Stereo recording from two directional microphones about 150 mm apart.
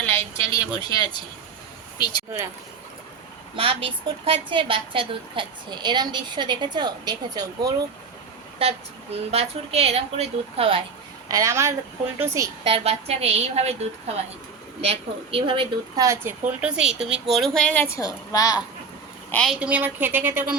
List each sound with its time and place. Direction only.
0.0 s a woman's voice: 15° left (ahead or behind)
3.5 s a woman's voice: 35° right (ahead or behind)
8.6 s a woman's voice: 40° right (ahead or behind)
11.3 s speech: 20° right (ahead or behind)
12.6 s a woman's voice: 40° right (ahead or behind)
16.0 s speech: 20° right (ahead or behind)
16.5 s speech: 10° right (ahead or behind); by 18.6 s 25° left (ahead or behind)
19.3 s a woman's voice: 5° left (ahead or behind)
19.5 s speech: 10° right (ahead or behind)